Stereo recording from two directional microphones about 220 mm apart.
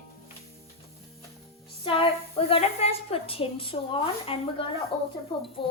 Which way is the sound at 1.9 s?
25° left (ahead or behind).